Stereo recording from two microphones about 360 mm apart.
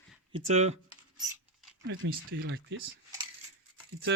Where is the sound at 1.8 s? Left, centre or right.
Right.